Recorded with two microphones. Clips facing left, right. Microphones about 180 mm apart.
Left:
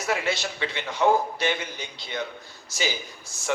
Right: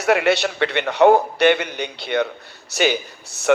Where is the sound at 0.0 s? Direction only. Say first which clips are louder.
Right 10 dB; 70° right (ahead or behind).